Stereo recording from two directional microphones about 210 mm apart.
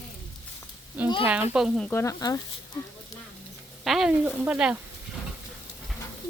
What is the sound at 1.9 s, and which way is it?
Frying, 15° left (ahead or behind).